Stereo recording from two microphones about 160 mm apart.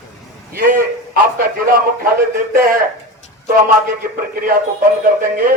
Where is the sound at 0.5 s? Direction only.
65° right (ahead or behind).